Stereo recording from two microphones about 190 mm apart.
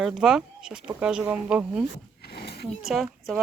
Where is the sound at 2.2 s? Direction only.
55° left (ahead or behind).